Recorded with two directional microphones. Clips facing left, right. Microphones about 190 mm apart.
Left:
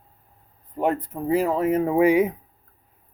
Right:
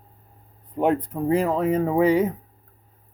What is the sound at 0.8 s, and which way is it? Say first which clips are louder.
Speech: right 2 dB; 5° left (ahead or behind).